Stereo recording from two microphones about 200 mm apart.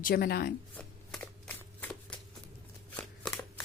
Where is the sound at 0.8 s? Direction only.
5° left (ahead or behind).